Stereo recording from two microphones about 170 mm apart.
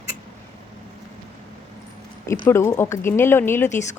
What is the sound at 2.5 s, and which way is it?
A woman's voice, 15° left (ahead or behind).